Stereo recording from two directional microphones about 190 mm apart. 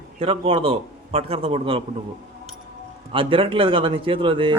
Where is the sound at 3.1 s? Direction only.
25° right (ahead or behind).